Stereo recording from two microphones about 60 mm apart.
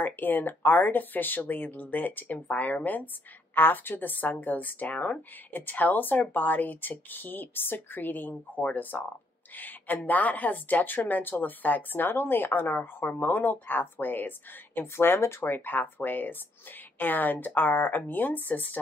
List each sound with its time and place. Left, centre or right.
0.0 s speech: left